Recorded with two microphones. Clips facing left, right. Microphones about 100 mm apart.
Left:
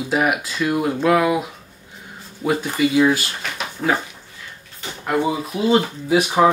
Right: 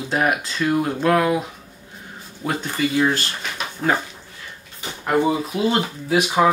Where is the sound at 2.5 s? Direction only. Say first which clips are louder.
Left 4 dB; 5° left (ahead or behind).